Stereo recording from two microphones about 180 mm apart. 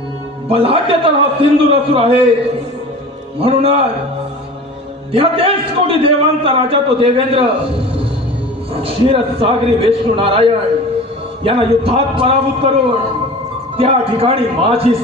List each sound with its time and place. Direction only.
0.5 s a man's voice: 30° right (ahead or behind)
3.3 s a man's voice: 30° right (ahead or behind)
5.1 s a man's voice: 30° right (ahead or behind)
8.7 s a man's voice: 30° right (ahead or behind)
13.7 s a man's voice: 30° right (ahead or behind)